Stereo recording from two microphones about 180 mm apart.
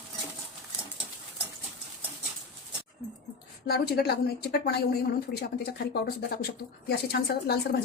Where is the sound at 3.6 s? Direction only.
60° left (ahead or behind).